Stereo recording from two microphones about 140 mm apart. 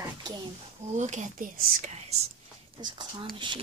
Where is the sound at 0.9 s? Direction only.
60° right (ahead or behind).